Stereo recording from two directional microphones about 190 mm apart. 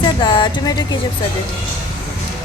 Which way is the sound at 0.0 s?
25° left (ahead or behind).